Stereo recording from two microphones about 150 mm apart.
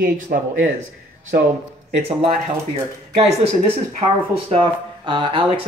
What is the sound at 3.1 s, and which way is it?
Speech, 40° right (ahead or behind).